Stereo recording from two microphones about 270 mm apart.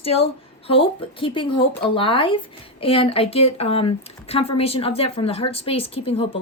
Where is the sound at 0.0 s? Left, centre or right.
Left.